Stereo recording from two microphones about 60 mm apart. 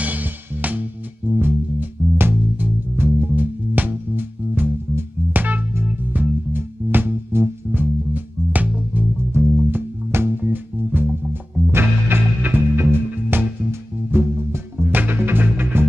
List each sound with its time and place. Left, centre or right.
0.0 s music: right
9.1 s music: right
13.1 s music: right
13.7 s music: right